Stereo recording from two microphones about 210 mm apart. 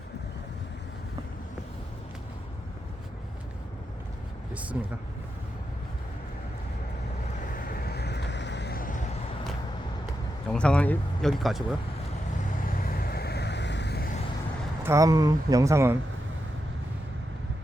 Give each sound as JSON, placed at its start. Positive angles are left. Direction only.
{"t": 4.7, "sound": "speech", "side_deg": -10}
{"t": 7.4, "sound": "vehicle", "side_deg": 40}
{"t": 10.5, "sound": "speech", "side_deg": 5}
{"t": 12.6, "sound": "vehicle", "side_deg": 45}
{"t": 14.8, "sound": "speech", "side_deg": -15}